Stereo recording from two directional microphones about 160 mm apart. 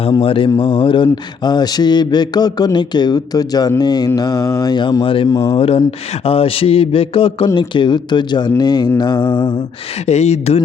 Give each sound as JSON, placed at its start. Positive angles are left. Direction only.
{"t": 0.0, "sound": "speech", "side_deg": 35}
{"t": 10.1, "sound": "speech", "side_deg": 40}